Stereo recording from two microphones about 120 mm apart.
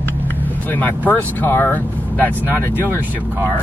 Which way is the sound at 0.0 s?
15° left (ahead or behind).